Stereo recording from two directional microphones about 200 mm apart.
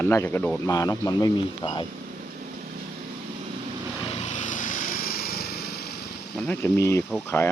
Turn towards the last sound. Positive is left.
turn(degrees=10)  # may be behind; listen again after turning